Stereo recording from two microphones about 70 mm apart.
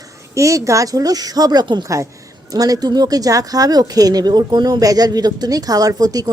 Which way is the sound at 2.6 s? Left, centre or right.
Right.